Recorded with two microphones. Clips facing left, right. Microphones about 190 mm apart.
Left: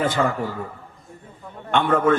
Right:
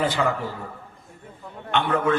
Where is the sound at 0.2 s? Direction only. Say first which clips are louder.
Left 3 dB; 50° left (ahead or behind).